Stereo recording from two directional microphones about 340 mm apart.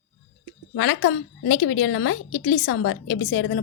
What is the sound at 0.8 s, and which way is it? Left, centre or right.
A woman's voice, left.